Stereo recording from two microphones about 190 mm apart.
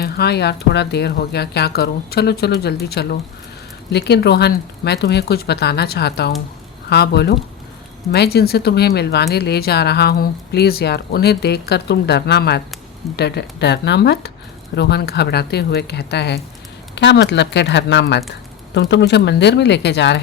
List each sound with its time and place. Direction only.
0.0 s speech: 60° left (ahead or behind)